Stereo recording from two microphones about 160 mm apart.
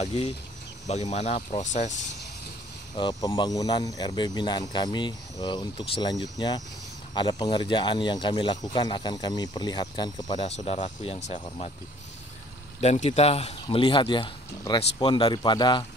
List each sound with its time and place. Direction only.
0.0 s speech: 45° left (ahead or behind)
3.0 s speech: 25° left (ahead or behind)
10.4 s speech: 40° left (ahead or behind)
12.8 s speech: 40° left (ahead or behind); by 15.8 s 25° left (ahead or behind)